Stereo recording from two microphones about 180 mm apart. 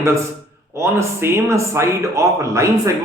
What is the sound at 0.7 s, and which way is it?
A man's voice, 15° right (ahead or behind).